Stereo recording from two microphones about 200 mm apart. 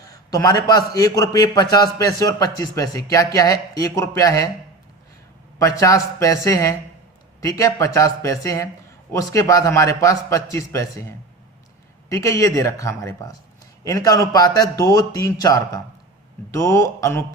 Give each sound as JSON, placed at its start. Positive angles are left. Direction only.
{"t": 0.1, "sound": "a man's voice", "side_deg": 15}
{"t": 5.5, "sound": "a man's voice", "side_deg": 15}
{"t": 12.0, "sound": "a man's voice", "side_deg": 15}